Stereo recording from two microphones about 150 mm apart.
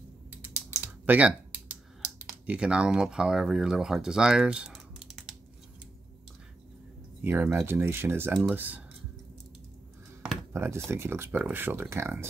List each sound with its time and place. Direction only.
0.4 s typing: 10° right (ahead or behind)
2.2 s speech: 5° right (ahead or behind)
7.2 s speech: 10° right (ahead or behind)
10.5 s speech: 15° right (ahead or behind)